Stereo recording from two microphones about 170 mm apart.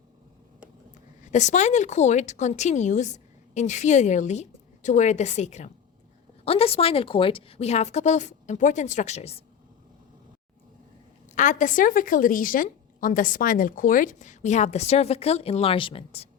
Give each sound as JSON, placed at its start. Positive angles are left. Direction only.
{"t": 1.3, "sound": "a woman's voice", "side_deg": 45}
{"t": 11.3, "sound": "a woman's voice", "side_deg": 50}